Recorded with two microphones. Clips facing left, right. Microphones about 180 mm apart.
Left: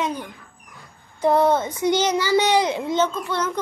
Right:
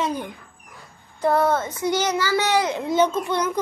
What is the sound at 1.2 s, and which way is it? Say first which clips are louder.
A child's voice: left 2 dB; 15° left (ahead or behind).